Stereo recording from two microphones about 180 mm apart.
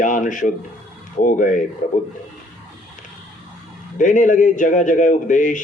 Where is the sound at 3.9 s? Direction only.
45° left (ahead or behind).